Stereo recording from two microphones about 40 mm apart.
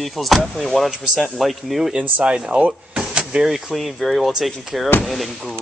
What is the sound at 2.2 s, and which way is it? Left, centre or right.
Speech, right.